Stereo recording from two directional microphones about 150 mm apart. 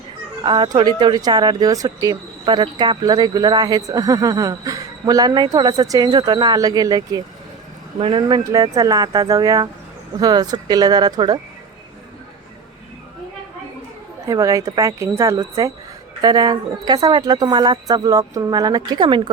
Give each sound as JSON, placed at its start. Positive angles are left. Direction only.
{"t": 0.4, "sound": "speech", "side_deg": -30}
{"t": 7.9, "sound": "speech", "side_deg": -35}
{"t": 8.5, "sound": "speech", "side_deg": -25}
{"t": 14.3, "sound": "speech", "side_deg": -25}